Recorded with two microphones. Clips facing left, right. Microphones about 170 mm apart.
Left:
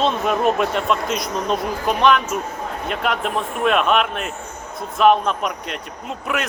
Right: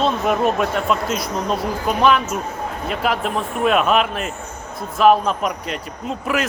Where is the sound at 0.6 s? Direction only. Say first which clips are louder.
Even; centre (ahead or behind).